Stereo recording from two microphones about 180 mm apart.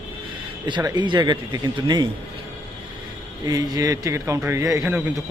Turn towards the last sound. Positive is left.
turn(degrees=-15)  # may be behind; listen again after turning